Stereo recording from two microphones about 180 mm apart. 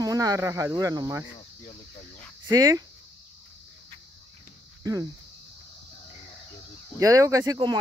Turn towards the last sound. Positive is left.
turn(degrees=-20)  # may be behind; listen again after turning